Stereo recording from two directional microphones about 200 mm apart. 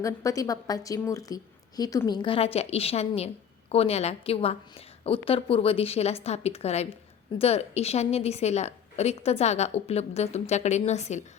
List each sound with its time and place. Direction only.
0.0 s a woman's voice: 15° left (ahead or behind); by 11.2 s 35° left (ahead or behind)